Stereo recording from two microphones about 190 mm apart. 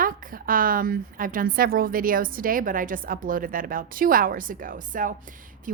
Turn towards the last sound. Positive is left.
turn(degrees=-45)  # may be behind; listen again after turning